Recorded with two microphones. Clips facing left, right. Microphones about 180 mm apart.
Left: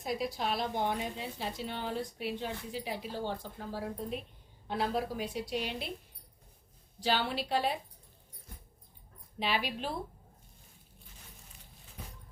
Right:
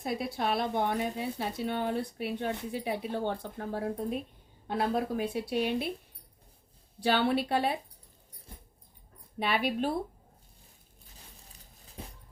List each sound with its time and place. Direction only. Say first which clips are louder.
0.0 s speech: right 2 dB; 60° right (ahead or behind)
7.0 s speech: right 5 dB; 60° right (ahead or behind)
9.4 s speech: right 5 dB; 55° right (ahead or behind)